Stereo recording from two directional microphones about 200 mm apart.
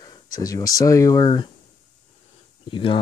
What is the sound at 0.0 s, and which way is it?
Speech, 20° left (ahead or behind).